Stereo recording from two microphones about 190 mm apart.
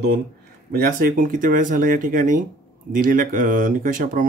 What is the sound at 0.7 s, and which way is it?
Speech, 50° right (ahead or behind).